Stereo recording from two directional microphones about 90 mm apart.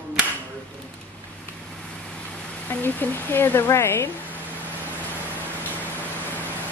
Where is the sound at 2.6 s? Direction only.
20° left (ahead or behind).